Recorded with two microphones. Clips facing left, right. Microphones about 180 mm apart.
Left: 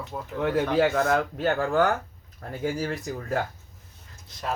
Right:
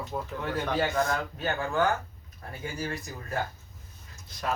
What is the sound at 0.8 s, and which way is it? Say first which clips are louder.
Speech: left 5 dB; 70° left (ahead or behind).